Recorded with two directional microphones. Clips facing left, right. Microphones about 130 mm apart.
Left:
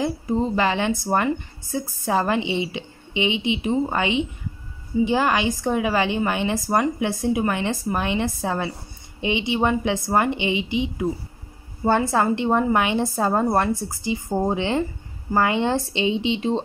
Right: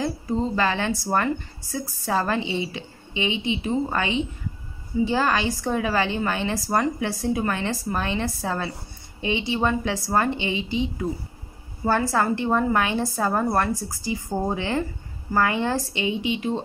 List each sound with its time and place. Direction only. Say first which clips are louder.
0.0 s a woman's voice: left 2 dB; 20° left (ahead or behind)